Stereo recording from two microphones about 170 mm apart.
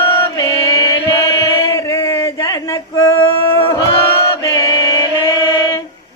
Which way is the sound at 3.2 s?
30° left (ahead or behind).